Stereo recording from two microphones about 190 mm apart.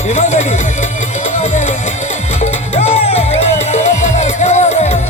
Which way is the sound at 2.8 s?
35° left (ahead or behind).